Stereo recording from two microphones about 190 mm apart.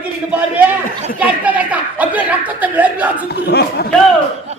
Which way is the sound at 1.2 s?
10° right (ahead or behind).